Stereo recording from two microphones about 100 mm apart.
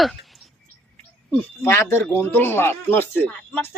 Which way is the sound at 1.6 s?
25° left (ahead or behind).